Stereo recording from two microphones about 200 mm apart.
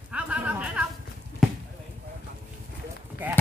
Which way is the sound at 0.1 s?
5° right (ahead or behind).